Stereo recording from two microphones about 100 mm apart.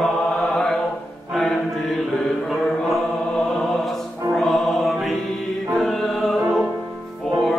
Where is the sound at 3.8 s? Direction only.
Centre (ahead or behind).